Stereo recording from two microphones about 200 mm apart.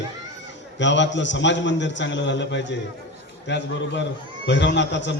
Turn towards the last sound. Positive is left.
turn(degrees=65)  # may be behind; listen again after turning